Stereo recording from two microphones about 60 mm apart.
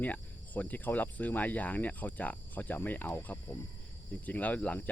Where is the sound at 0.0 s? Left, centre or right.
Left.